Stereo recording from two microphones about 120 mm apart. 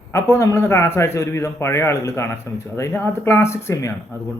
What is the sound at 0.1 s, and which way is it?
A man's voice, 25° left (ahead or behind).